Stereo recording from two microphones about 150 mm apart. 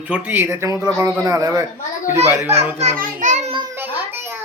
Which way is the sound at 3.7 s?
15° right (ahead or behind).